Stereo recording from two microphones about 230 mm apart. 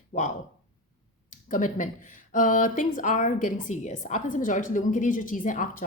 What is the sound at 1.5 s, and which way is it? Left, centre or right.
A woman's voice, left.